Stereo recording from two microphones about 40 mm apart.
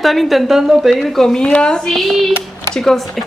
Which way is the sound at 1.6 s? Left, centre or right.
Centre.